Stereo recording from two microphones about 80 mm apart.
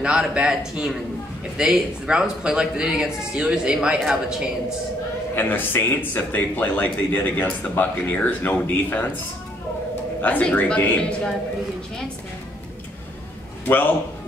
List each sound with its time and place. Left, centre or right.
0.0 s a man's voice: centre
5.3 s speech: left
10.2 s a man's voice: left